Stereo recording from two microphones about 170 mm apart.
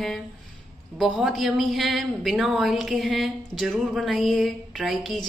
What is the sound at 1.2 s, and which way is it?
A woman's voice, centre (ahead or behind).